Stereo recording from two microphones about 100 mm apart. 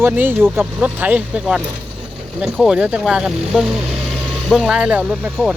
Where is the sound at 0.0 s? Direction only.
20° right (ahead or behind).